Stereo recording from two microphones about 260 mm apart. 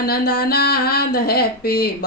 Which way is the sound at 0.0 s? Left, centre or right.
Left.